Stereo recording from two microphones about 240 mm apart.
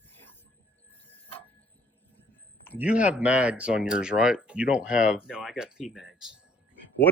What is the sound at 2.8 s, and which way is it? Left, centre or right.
Speech, centre.